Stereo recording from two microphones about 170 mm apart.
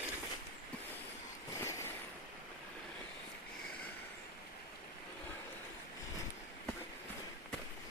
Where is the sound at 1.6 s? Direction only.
15° left (ahead or behind).